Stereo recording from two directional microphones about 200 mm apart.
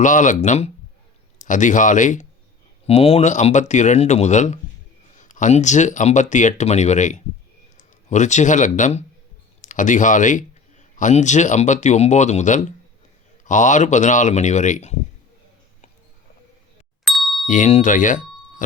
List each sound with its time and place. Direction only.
0.0 s a man's voice: 40° left (ahead or behind)
17.1 s ding: centre (ahead or behind)
17.4 s speech: 40° left (ahead or behind)